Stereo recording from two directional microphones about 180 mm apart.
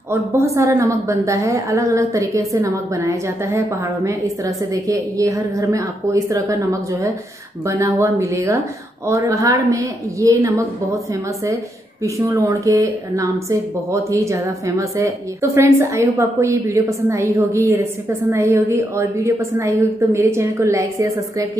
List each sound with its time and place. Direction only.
0.1 s a woman's voice: 15° right (ahead or behind)
12.0 s a woman's voice: 15° right (ahead or behind)